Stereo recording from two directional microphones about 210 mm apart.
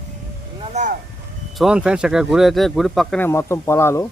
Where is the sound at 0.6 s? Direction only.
35° right (ahead or behind).